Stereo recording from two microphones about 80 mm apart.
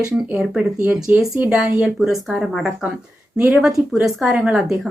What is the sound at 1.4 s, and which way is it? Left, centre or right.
Speech, centre.